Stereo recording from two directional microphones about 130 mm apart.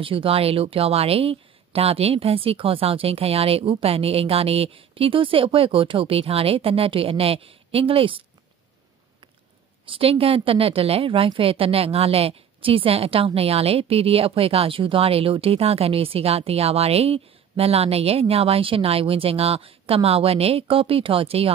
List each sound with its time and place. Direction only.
0.0 s a woman's voice: 45° right (ahead or behind)
9.8 s a woman's voice: 45° right (ahead or behind)